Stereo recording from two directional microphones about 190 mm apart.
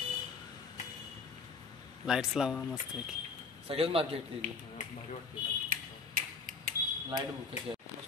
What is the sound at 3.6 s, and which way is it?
Speech, 30° right (ahead or behind).